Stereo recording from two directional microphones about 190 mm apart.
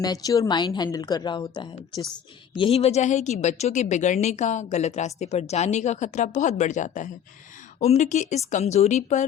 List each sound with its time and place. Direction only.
0.0 s a woman's voice: 20° left (ahead or behind); by 9.2 s 35° left (ahead or behind)